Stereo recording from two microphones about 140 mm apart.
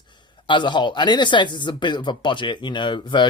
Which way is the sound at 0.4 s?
35° left (ahead or behind).